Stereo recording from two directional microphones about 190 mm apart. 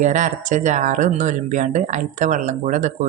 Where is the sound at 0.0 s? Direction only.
40° right (ahead or behind).